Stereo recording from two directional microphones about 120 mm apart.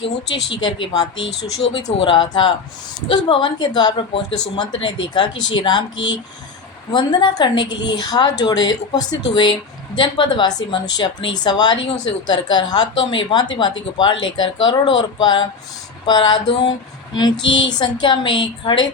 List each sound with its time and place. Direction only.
0.6 s a woman's voice: 35° left (ahead or behind)
6.9 s a woman's voice: 35° left (ahead or behind)